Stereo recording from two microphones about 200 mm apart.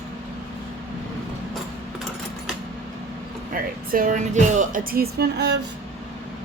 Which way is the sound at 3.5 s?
45° right (ahead or behind).